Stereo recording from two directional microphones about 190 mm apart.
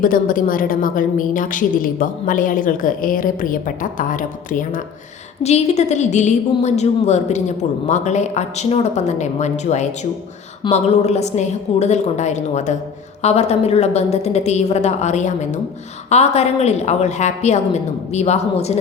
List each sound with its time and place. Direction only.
0.0 s a woman's voice: 45° left (ahead or behind)